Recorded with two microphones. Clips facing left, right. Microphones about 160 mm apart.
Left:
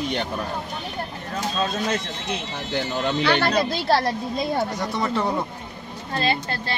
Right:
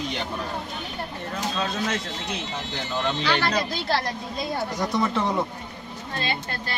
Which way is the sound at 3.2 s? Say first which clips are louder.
Left 5 dB; 60° left (ahead or behind).